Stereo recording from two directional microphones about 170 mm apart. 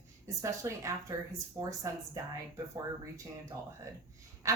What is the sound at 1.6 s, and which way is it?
Speech, 35° right (ahead or behind).